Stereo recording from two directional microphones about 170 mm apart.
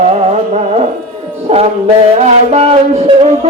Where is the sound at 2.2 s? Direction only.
40° right (ahead or behind).